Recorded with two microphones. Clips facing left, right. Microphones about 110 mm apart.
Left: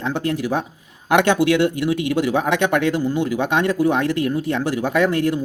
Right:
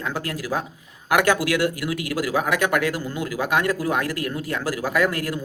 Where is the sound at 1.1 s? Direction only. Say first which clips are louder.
Left 4 dB; 25° left (ahead or behind).